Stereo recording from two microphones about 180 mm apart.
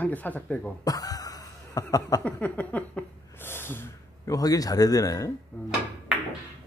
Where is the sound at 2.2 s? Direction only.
5° left (ahead or behind).